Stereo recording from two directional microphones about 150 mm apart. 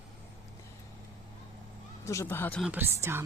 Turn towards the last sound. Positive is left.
turn(degrees=-15)  # may be behind; listen again after turning